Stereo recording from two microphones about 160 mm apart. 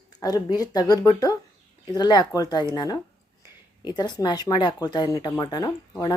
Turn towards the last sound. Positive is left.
turn(degrees=25)  # may be behind; listen again after turning